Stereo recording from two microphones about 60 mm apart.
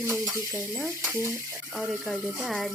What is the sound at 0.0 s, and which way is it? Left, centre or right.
Stir, right.